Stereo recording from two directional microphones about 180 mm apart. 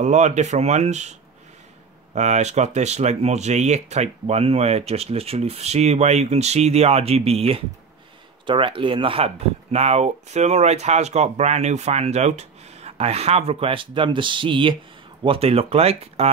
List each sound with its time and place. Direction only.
0.0 s speech: 40° right (ahead or behind)
2.1 s speech: 40° right (ahead or behind)